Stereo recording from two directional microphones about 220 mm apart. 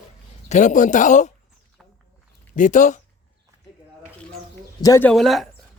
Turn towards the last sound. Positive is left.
turn(degrees=0)  # may be behind; listen again after turning